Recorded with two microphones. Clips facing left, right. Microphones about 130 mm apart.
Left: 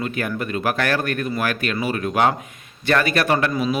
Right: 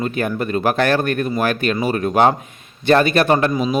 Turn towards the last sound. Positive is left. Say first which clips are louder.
# right 4 dB
turn(degrees=-30)  # may be behind; listen again after turning